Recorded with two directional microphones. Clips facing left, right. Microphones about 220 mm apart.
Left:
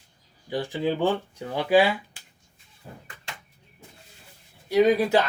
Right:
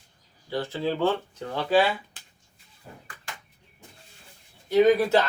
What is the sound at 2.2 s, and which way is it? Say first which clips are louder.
Finger snapping: even; 10° left (ahead or behind).